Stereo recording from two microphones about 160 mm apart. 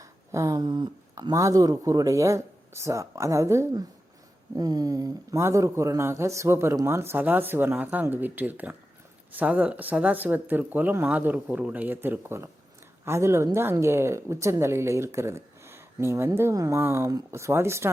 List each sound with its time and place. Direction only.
0.0 s a woman's voice: 20° right (ahead or behind)